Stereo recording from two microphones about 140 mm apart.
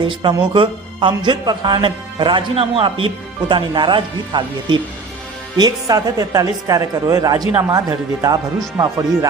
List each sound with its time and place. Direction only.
0.0 s speech: 35° right (ahead or behind)